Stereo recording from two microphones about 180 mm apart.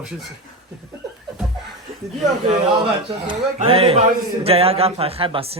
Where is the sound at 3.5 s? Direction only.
30° right (ahead or behind).